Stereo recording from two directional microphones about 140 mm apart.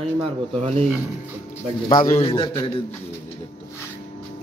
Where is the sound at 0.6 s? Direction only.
50° right (ahead or behind).